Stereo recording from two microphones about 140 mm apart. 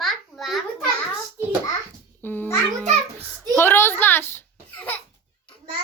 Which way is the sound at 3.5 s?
15° left (ahead or behind).